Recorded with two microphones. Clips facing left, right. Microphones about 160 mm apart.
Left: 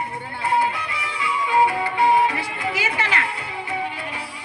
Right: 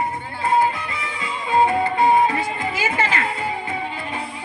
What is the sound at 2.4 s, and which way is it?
Music, 70° left (ahead or behind).